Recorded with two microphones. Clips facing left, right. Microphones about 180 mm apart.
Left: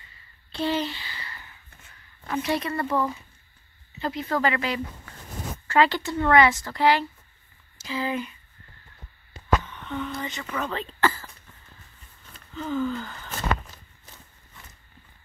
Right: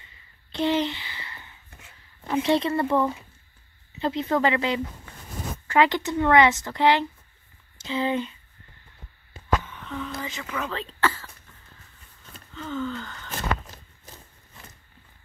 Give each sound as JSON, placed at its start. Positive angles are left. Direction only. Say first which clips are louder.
{"t": 0.0, "sound": "a sound", "louder": "even", "side_deg": -20}
{"t": 2.2, "sound": "speech", "louder": "right 4 dB", "side_deg": -25}
{"t": 9.7, "sound": "speech", "louder": "left 2 dB", "side_deg": 0}
{"t": 12.6, "sound": "gasp", "louder": "left 3 dB", "side_deg": 15}